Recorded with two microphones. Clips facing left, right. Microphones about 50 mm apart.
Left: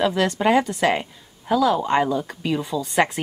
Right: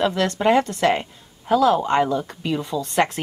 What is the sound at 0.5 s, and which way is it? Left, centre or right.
Speech, left.